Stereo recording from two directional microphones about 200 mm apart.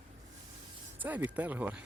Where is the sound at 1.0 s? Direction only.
10° right (ahead or behind).